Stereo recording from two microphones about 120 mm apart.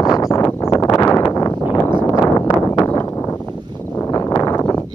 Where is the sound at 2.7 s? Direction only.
20° left (ahead or behind).